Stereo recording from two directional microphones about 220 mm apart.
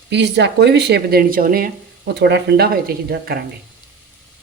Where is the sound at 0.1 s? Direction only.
50° right (ahead or behind).